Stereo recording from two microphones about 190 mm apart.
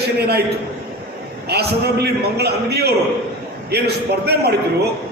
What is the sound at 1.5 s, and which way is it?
A man's voice, 60° right (ahead or behind).